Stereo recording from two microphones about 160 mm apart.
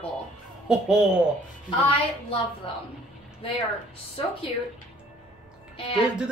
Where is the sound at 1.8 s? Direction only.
35° left (ahead or behind).